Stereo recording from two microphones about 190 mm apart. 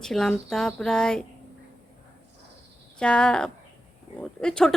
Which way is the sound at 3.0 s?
5° left (ahead or behind).